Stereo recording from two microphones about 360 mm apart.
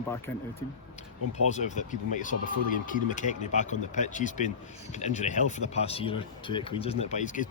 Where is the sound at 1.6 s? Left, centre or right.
Centre.